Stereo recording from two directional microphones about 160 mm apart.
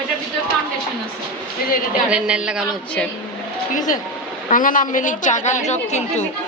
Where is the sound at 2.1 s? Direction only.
5° right (ahead or behind).